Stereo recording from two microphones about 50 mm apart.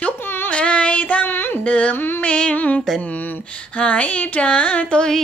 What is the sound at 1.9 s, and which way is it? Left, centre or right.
Speech, left.